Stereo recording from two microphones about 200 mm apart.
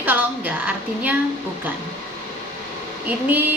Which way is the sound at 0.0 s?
10° right (ahead or behind).